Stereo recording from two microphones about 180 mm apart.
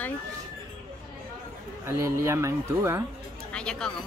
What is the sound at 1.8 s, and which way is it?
Speech, 15° right (ahead or behind).